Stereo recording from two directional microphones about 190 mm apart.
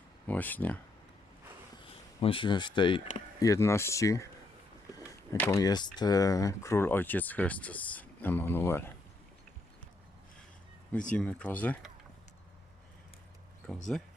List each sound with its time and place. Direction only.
0.3 s speech: 10° left (ahead or behind)
2.2 s speech: 25° left (ahead or behind)
3.4 s speech: 15° left (ahead or behind)
5.3 s speech: 15° left (ahead or behind)
11.1 s speech: 5° left (ahead or behind)
13.9 s speech: 5° left (ahead or behind)